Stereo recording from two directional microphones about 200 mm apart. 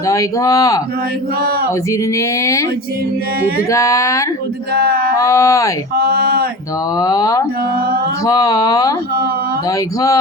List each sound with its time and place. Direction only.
0.1 s speech: 15° left (ahead or behind)
2.1 s speech: 15° left (ahead or behind)
3.7 s speech: 15° left (ahead or behind)
4.7 s male singing: 50° right (ahead or behind)
5.1 s speech: 15° left (ahead or behind)
6.0 s a sound: 50° right (ahead or behind)
7.0 s speech: 15° left (ahead or behind)